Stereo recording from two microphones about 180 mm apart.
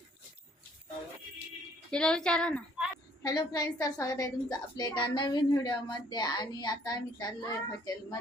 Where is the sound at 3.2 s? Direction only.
20° left (ahead or behind).